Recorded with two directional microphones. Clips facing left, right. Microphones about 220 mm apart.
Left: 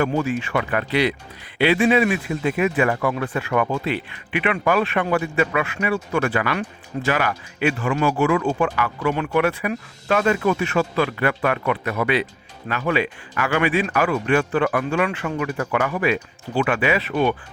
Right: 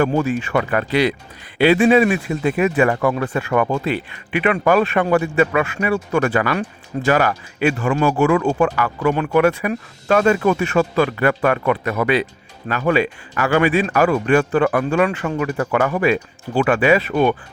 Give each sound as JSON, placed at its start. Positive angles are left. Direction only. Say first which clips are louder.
{"t": 0.0, "sound": "speech", "louder": "right 3 dB", "side_deg": -45}